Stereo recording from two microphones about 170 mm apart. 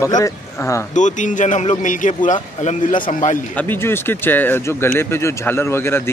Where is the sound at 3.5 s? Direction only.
10° left (ahead or behind).